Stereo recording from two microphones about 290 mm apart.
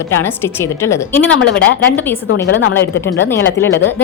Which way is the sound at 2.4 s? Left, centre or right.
Left.